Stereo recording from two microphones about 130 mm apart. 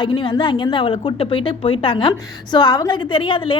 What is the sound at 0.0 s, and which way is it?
A woman's voice, 35° left (ahead or behind).